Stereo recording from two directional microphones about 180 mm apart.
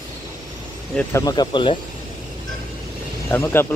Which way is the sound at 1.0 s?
20° left (ahead or behind).